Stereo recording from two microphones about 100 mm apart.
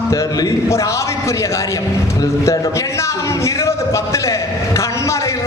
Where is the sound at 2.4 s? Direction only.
30° left (ahead or behind).